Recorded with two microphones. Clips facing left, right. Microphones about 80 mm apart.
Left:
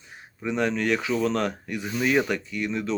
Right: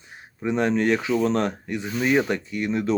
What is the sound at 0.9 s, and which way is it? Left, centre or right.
Speech, centre.